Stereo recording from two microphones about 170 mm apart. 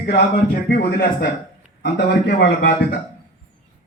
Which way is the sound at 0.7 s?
60° left (ahead or behind).